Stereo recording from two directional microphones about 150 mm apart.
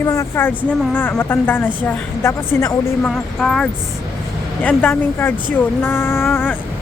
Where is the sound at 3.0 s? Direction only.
5° left (ahead or behind).